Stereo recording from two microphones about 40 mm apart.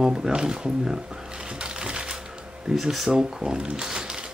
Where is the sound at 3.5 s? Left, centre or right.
Centre.